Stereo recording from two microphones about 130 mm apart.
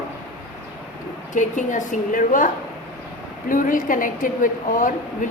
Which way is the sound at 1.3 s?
75° left (ahead or behind).